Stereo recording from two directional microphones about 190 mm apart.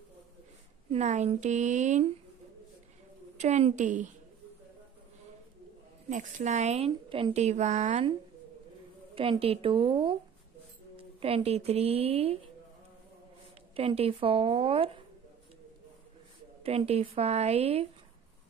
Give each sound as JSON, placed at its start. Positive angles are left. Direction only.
{"t": 0.8, "sound": "a woman's voice", "side_deg": -35}
{"t": 3.3, "sound": "a woman's voice", "side_deg": -35}
{"t": 6.0, "sound": "a woman's voice", "side_deg": -40}
{"t": 9.1, "sound": "speech", "side_deg": -30}
{"t": 13.7, "sound": "speech", "side_deg": -30}
{"t": 16.6, "sound": "a woman's voice", "side_deg": -30}